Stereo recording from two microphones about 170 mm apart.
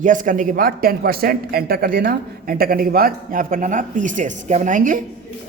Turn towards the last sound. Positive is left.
turn(degrees=-50)  # may be behind; listen again after turning